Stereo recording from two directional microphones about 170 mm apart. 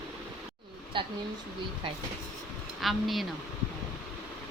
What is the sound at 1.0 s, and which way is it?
Speech, 30° right (ahead or behind).